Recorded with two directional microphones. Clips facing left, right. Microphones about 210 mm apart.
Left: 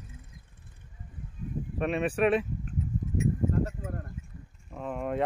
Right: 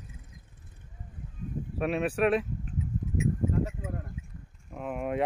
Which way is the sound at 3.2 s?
Centre (ahead or behind).